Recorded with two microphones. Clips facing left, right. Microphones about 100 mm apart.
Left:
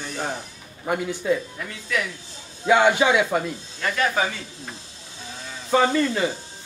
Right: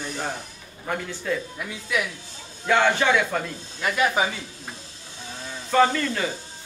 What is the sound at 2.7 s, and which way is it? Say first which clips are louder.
Speech: left 3 dB; 15° left (ahead or behind).